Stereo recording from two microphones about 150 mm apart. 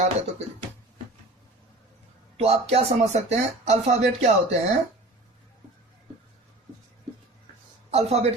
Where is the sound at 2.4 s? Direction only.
45° right (ahead or behind).